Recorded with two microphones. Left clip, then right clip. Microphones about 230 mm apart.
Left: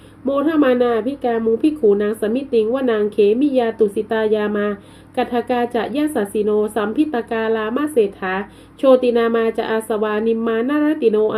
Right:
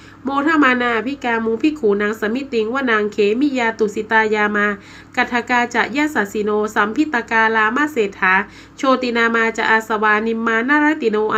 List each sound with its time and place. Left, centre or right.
0.3 s a woman's voice: right